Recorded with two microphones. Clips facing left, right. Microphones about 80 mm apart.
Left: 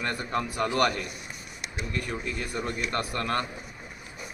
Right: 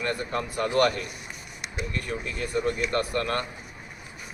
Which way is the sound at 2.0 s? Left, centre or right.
Centre.